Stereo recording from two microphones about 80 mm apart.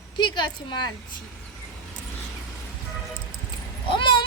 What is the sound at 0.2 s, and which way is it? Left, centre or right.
Speech, left.